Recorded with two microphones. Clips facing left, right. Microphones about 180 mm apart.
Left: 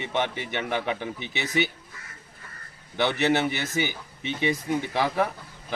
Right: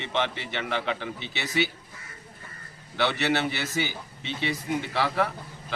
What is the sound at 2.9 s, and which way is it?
Speech, 15° left (ahead or behind).